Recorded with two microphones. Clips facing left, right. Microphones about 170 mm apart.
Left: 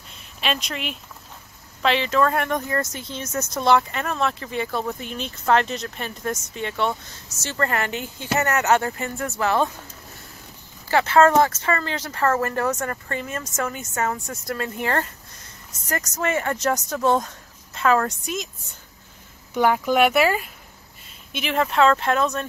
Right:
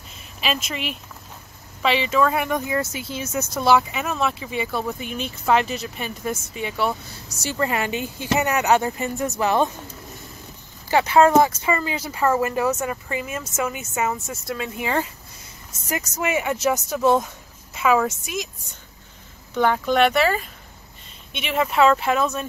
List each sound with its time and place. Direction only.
0.1 s a sound: 5° right (ahead or behind)
1.8 s speech: 5° right (ahead or behind)
10.9 s speech: 15° right (ahead or behind)
19.5 s speech: 10° left (ahead or behind); by 22.5 s 5° right (ahead or behind)